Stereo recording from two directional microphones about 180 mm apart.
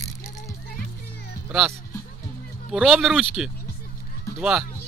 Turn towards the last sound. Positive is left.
turn(degrees=0)  # may be behind; listen again after turning